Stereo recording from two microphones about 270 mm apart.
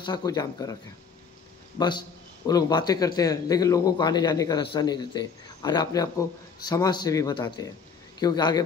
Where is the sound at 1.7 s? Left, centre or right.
Centre.